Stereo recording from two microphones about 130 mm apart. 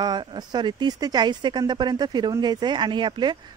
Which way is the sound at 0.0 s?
35° right (ahead or behind).